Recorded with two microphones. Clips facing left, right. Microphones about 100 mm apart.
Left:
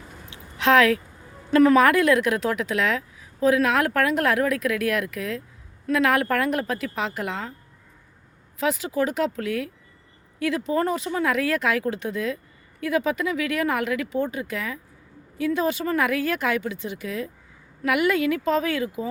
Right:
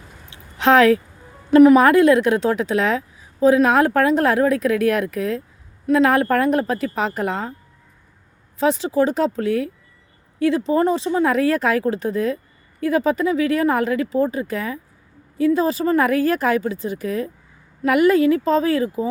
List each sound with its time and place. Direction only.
0.3 s a sound: 35° right (ahead or behind)
1.5 s speech: 20° right (ahead or behind); by 7.5 s 40° right (ahead or behind)
8.5 s speech: 30° right (ahead or behind)